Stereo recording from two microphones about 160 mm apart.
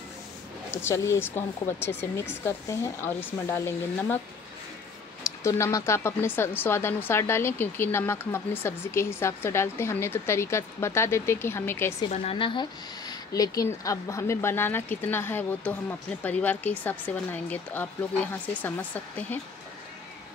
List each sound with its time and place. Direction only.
0.7 s speech: 15° left (ahead or behind)
5.2 s speech: 20° left (ahead or behind)
12.1 s speech: 40° left (ahead or behind); by 19.4 s 10° left (ahead or behind)